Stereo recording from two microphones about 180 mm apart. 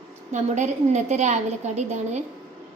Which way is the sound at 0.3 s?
40° right (ahead or behind).